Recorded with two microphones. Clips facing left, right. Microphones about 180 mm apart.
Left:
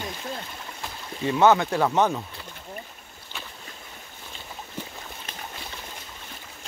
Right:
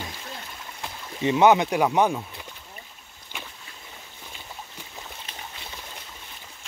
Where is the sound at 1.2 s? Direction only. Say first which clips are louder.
Right 1 dB; 15° right (ahead or behind).